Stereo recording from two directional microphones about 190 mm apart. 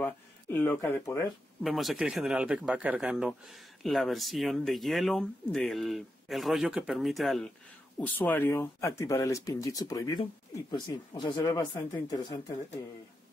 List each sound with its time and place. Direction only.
0.0 s speech: 10° left (ahead or behind)
1.6 s speech: centre (ahead or behind); by 12.4 s 20° left (ahead or behind)